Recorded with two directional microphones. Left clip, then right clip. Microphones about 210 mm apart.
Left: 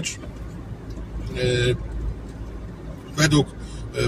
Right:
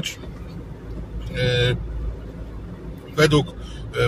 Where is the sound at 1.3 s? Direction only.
20° right (ahead or behind).